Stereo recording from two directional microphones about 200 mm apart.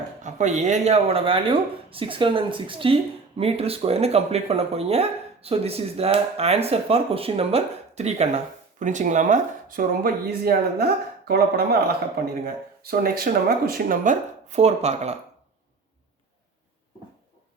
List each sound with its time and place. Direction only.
0.2 s speech: 35° right (ahead or behind)